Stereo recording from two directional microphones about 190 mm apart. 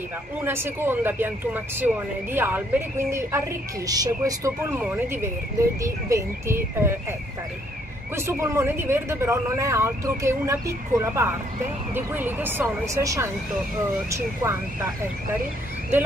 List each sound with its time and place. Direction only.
0.4 s speech: 10° right (ahead or behind)
8.2 s speech: 15° right (ahead or behind)